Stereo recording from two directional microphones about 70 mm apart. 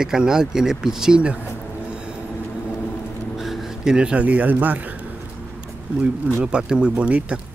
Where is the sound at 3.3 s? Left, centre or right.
Centre; by 4.5 s right.